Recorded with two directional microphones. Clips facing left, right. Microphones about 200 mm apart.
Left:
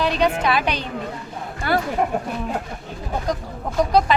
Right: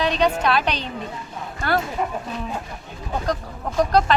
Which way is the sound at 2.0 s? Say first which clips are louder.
Left 4 dB; 55° left (ahead or behind).